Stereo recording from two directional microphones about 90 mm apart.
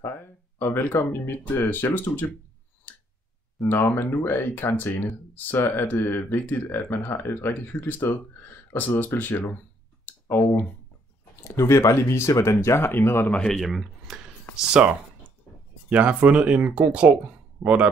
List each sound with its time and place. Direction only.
0.0 s speech: 25° left (ahead or behind)
2.9 s a sound: 20° left (ahead or behind)
3.6 s speech: 20° left (ahead or behind)
10.0 s clicking: 25° left (ahead or behind)
11.4 s speech: 30° left (ahead or behind)
13.3 s speech: 5° left (ahead or behind)
14.8 s speech: 15° right (ahead or behind)